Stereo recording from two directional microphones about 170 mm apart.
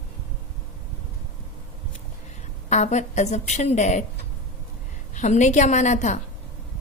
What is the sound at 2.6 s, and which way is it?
A woman's voice, 40° left (ahead or behind).